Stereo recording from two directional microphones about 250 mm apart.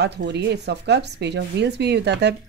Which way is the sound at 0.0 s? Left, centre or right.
Right.